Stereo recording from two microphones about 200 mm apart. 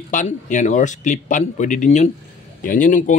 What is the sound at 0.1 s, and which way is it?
Speech, 40° left (ahead or behind).